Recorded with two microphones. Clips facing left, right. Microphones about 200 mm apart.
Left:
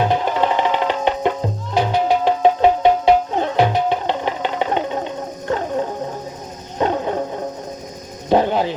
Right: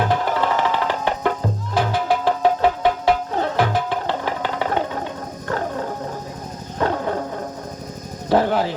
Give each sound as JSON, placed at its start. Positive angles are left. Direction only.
{"t": 0.1, "sound": "music", "side_deg": 20}
{"t": 6.7, "sound": "music", "side_deg": 20}
{"t": 8.3, "sound": "music", "side_deg": 20}